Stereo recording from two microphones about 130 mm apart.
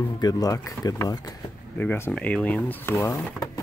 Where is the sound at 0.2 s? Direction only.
30° left (ahead or behind).